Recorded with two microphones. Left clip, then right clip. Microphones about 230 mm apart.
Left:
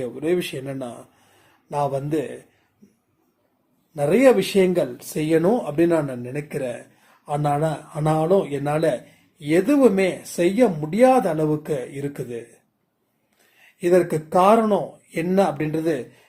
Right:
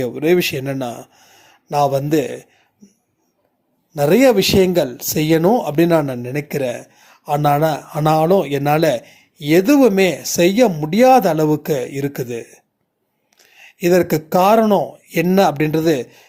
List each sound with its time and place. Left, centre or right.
0.0 s speech: right
3.9 s speech: right
13.6 s speech: right